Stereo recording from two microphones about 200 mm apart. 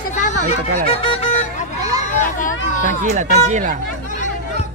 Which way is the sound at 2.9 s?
40° right (ahead or behind).